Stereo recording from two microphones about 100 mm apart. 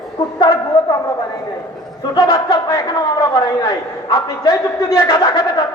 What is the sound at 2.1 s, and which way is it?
A man's voice, 35° left (ahead or behind).